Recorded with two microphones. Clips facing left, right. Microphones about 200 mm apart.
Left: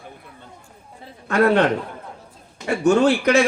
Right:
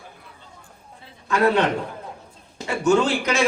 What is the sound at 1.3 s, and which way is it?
Speech, 60° left (ahead or behind).